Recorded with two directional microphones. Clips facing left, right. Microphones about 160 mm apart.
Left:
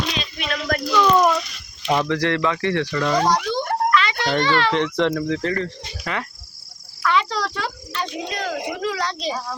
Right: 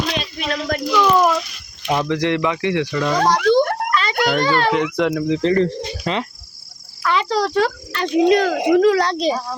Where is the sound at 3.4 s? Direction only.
80° right.